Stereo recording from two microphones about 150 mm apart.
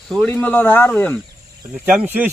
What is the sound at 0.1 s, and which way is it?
Speech, 5° left (ahead or behind).